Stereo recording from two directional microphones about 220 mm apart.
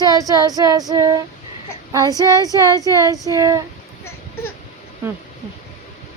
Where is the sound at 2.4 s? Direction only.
15° right (ahead or behind).